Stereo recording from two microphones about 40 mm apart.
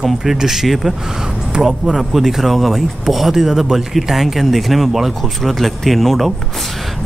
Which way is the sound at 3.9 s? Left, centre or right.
Centre.